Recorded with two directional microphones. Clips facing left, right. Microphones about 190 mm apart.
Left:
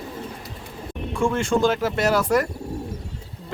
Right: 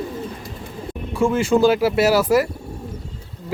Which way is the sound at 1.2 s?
5° right (ahead or behind).